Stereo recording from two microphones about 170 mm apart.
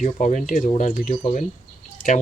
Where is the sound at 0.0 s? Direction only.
45° left (ahead or behind).